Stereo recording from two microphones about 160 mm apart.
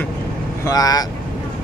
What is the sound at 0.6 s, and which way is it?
Speech, 25° left (ahead or behind).